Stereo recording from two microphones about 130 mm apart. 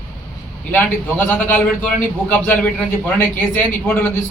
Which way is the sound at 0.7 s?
15° left (ahead or behind).